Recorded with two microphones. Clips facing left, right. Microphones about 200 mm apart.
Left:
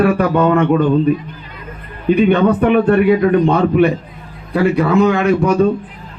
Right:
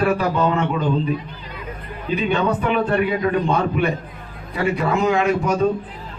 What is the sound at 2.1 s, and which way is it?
A man's voice, 60° left (ahead or behind).